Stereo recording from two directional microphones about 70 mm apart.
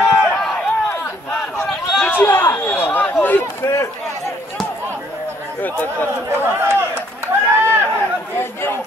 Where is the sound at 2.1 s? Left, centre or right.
Left.